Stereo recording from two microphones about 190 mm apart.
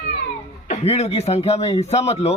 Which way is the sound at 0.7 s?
35° left (ahead or behind).